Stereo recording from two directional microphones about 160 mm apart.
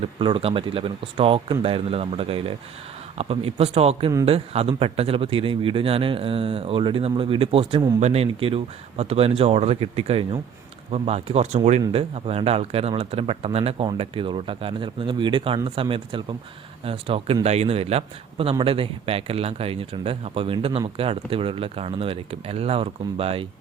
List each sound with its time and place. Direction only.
0.2 s speech: 35° right (ahead or behind)